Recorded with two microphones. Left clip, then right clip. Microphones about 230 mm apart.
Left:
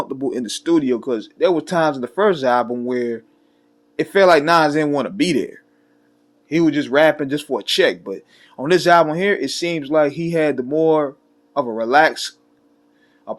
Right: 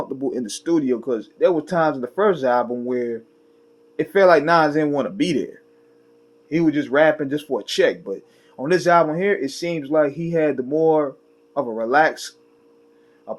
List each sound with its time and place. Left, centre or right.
0.0 s speech: left